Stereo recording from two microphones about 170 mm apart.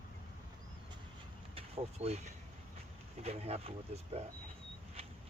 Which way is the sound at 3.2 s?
35° right (ahead or behind).